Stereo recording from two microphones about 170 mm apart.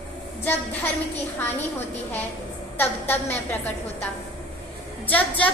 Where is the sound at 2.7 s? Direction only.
10° left (ahead or behind).